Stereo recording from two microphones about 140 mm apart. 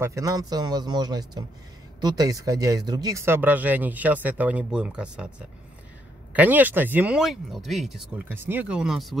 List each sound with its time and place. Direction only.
0.0 s speech: 25° right (ahead or behind); by 5.3 s 5° right (ahead or behind)
6.3 s speech: 10° right (ahead or behind)
8.3 s speech: 15° right (ahead or behind)